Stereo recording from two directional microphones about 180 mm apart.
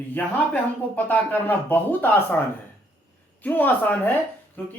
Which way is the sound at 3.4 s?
10° left (ahead or behind).